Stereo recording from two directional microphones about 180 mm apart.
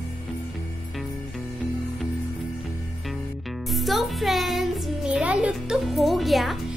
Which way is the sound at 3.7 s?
Centre (ahead or behind).